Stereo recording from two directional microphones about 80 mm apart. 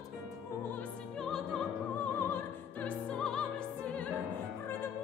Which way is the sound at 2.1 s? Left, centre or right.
Left.